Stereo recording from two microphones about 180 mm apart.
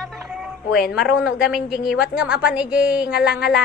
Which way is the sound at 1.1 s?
5° right (ahead or behind).